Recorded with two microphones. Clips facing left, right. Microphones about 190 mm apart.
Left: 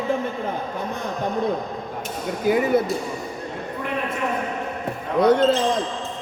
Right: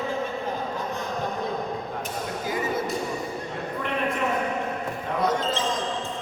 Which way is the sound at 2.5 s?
65° left (ahead or behind).